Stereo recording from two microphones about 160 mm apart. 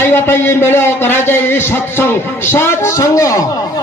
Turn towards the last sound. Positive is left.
turn(degrees=20)  # may be behind; listen again after turning